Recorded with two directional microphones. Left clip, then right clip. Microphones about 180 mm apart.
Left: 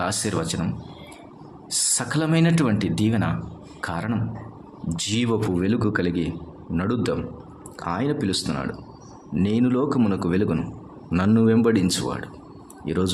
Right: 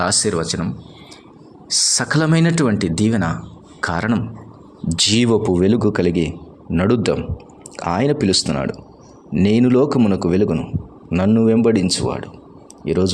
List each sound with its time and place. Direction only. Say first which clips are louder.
0.0 s speech: right 7 dB; 30° right (ahead or behind)
1.7 s speech: right 8 dB; 30° right (ahead or behind)